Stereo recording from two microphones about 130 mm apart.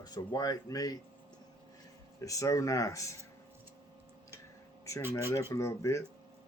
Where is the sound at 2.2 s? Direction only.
25° left (ahead or behind).